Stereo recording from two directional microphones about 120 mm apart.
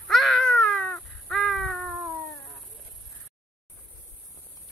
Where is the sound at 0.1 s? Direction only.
Centre (ahead or behind).